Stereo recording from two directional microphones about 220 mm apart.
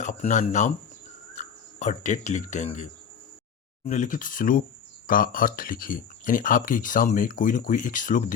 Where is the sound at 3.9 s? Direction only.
35° left (ahead or behind).